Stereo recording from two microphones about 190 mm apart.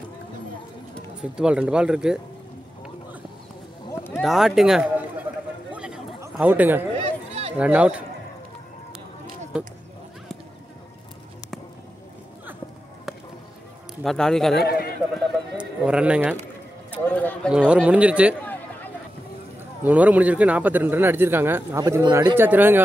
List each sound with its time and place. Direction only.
1.3 s speech: 5° right (ahead or behind)
3.9 s a sound: 15° left (ahead or behind)
4.2 s speech: centre (ahead or behind)
5.7 s a sound: 5° right (ahead or behind)
6.3 s speech: 10° right (ahead or behind)
14.0 s speech: 5° left (ahead or behind)
14.6 s a man's voice: 55° left (ahead or behind)
15.1 s horse: 5° right (ahead or behind)
17.0 s speech: 10° left (ahead or behind)
17.5 s speech: 5° right (ahead or behind)
18.4 s a sound: 10° left (ahead or behind)
19.8 s speech: 5° right (ahead or behind)